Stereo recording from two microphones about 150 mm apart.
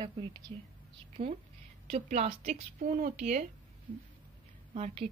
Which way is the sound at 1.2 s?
40° right (ahead or behind).